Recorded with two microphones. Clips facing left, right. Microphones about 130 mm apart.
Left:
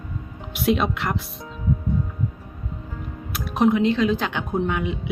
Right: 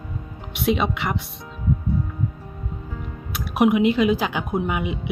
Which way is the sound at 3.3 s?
5° right (ahead or behind).